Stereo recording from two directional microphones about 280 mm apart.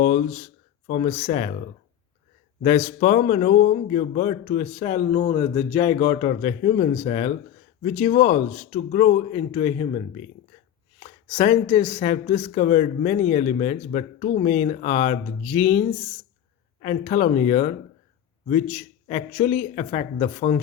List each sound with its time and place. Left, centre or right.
0.0 s speech: left
2.6 s speech: left
11.3 s speech: left
16.8 s speech: left
19.0 s speech: left